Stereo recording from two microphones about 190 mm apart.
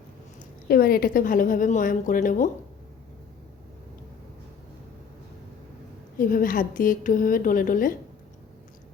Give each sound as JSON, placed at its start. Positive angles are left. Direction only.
{"t": 0.7, "sound": "a woman's voice", "side_deg": 50}
{"t": 6.1, "sound": "a woman's voice", "side_deg": 45}